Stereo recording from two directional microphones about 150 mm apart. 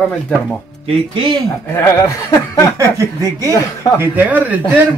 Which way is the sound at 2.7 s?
20° right (ahead or behind).